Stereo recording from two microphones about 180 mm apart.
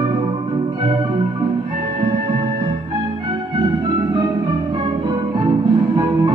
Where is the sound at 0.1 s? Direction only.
25° right (ahead or behind).